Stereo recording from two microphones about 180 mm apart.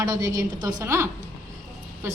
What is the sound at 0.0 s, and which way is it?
A woman's voice, 20° right (ahead or behind).